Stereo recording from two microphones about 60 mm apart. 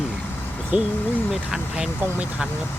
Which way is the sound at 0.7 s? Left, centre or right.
Right.